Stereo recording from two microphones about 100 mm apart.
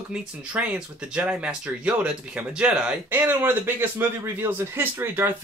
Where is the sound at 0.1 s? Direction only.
10° right (ahead or behind).